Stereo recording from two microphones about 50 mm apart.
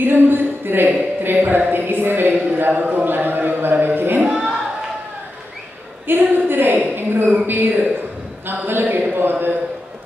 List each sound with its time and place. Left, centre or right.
0.0 s a woman's voice: right
2.6 s a woman's voice: right
4.3 s a sound: centre
6.0 s a woman's voice: right